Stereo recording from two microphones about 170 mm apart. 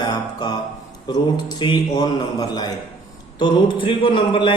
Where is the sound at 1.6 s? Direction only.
25° left (ahead or behind).